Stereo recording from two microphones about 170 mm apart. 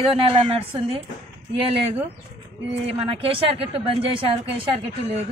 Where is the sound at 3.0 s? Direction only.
30° right (ahead or behind).